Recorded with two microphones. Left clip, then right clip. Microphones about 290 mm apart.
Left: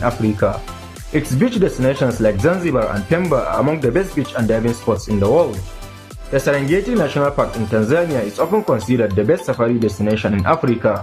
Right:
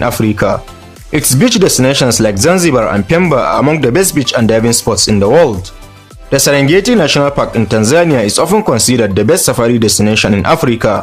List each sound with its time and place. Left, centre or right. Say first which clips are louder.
1.1 s speech: right 8 dB; right
6.3 s speech: right 8 dB; right